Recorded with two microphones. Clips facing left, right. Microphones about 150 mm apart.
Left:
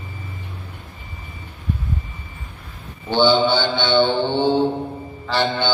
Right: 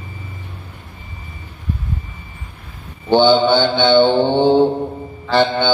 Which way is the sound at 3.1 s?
50° right (ahead or behind).